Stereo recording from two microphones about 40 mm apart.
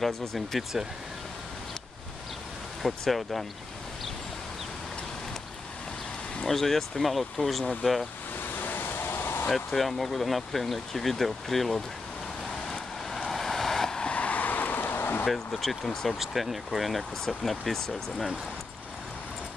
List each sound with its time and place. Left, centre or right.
0.0 s speech: centre
2.8 s speech: centre
6.4 s speech: centre
8.5 s a sound: left
9.5 s speech: centre
12.6 s vehicle: centre
13.3 s waves: centre
14.0 s vehicle: left
15.2 s speech: centre
16.2 s speech: centre